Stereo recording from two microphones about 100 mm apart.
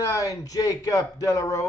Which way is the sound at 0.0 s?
35° left (ahead or behind).